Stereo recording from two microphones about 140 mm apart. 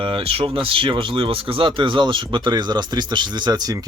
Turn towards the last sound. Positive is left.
turn(degrees=-30)  # may be behind; listen again after turning